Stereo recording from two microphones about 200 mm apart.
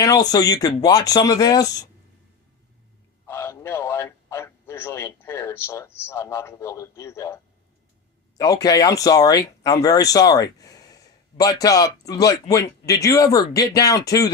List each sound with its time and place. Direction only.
0.0 s speech: 20° left (ahead or behind)
3.2 s a man's voice: 15° left (ahead or behind)
8.4 s speech: 20° left (ahead or behind)